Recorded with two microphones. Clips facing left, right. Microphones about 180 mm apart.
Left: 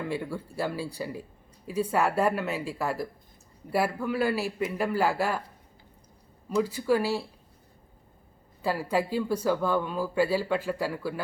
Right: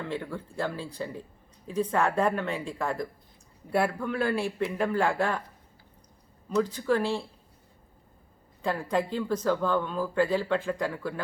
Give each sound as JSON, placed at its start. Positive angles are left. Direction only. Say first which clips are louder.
{"t": 0.0, "sound": "a man's voice", "louder": "left 2 dB", "side_deg": 10}
{"t": 6.5, "sound": "speech", "louder": "left 1 dB", "side_deg": 10}
{"t": 8.6, "sound": "speech", "louder": "left 1 dB", "side_deg": 5}